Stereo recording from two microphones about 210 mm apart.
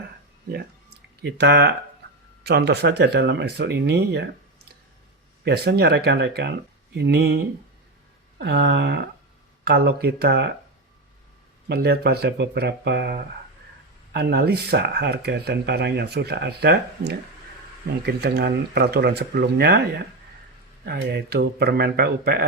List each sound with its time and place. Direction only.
1.2 s speech: 55° right (ahead or behind)
5.5 s speech: 50° right (ahead or behind)
8.4 s speech: 55° right (ahead or behind)
11.7 s speech: 50° right (ahead or behind)